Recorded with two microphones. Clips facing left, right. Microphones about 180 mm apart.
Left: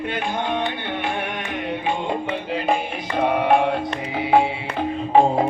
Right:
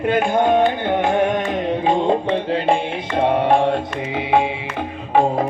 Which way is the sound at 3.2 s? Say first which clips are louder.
Right 2 dB; 25° right (ahead or behind).